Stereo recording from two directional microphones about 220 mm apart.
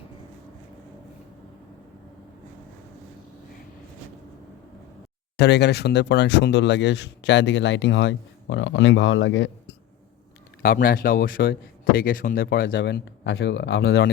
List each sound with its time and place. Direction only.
5.4 s speech: 50° left (ahead or behind)
10.6 s speech: 40° left (ahead or behind)